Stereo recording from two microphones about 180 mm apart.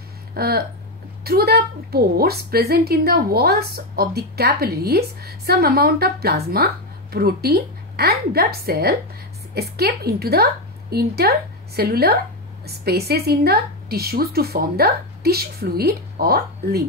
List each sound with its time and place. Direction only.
0.3 s a woman's voice: 60° right (ahead or behind)